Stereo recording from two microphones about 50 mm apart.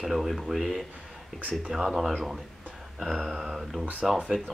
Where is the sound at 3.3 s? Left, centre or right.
Centre.